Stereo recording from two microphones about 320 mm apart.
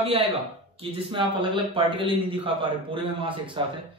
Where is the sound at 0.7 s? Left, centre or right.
Centre.